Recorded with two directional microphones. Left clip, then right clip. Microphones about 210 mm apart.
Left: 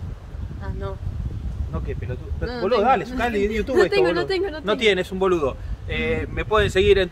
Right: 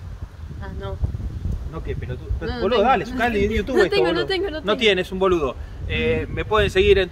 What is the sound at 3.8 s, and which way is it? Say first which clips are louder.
Speech: even; 5° right (ahead or behind).